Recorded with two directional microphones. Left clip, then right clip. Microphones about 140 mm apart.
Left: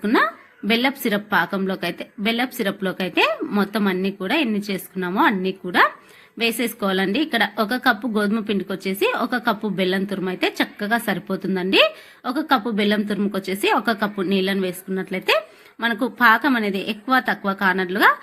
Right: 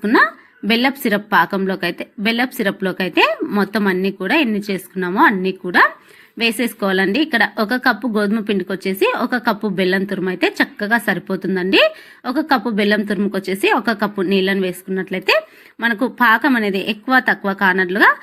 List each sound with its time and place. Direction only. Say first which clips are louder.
0.0 s a woman's voice: right 5 dB; 25° right (ahead or behind)